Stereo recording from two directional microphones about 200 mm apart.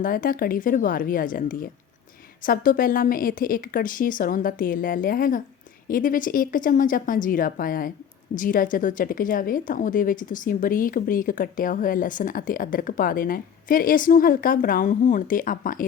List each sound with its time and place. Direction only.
0.0 s a woman's voice: 45° left (ahead or behind)